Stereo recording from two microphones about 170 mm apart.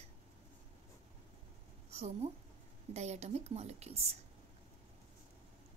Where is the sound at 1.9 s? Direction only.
40° right (ahead or behind).